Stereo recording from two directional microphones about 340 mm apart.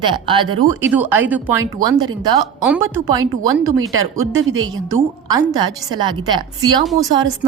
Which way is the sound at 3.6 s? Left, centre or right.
Right.